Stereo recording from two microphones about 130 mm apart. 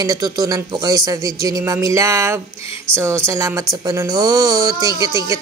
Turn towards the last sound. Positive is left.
turn(degrees=-25)  # may be behind; listen again after turning